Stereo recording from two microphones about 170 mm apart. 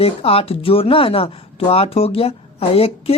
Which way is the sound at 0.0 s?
35° left (ahead or behind).